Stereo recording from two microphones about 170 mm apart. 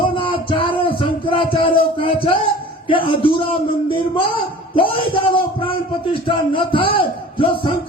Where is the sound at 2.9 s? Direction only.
30° left (ahead or behind).